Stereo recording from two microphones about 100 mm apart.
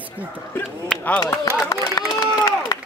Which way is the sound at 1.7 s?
35° left (ahead or behind).